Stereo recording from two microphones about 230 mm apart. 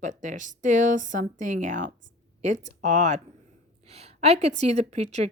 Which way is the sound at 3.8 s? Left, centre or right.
Right.